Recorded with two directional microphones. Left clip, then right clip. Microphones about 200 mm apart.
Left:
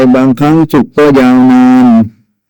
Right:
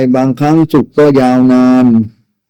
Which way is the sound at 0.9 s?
35° left (ahead or behind).